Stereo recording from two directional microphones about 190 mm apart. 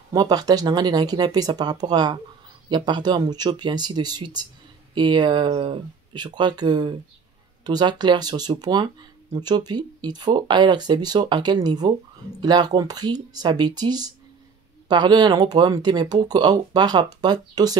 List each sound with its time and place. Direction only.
0.1 s speech: 20° right (ahead or behind)